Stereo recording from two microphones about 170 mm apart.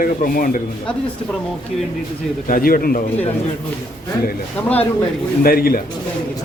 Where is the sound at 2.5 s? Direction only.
55° left (ahead or behind).